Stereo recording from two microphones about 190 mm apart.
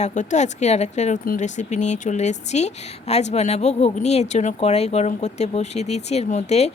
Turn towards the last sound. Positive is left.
turn(degrees=35)  # may be behind; listen again after turning